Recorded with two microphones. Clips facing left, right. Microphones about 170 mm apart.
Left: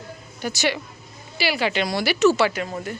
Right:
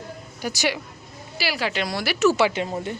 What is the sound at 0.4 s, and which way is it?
Speech, 10° right (ahead or behind).